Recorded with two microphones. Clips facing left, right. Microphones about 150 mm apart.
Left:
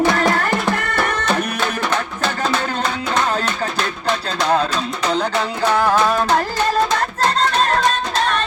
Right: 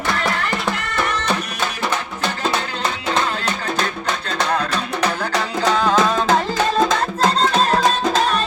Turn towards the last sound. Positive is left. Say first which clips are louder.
# right 1 dB
turn(degrees=0)  # may be behind; listen again after turning